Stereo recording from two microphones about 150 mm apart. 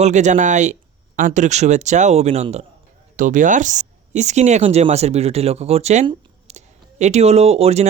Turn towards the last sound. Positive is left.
turn(degrees=-45)  # may be behind; listen again after turning